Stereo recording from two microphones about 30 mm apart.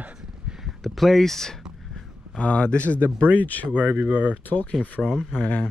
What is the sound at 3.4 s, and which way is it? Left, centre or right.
Speech, left.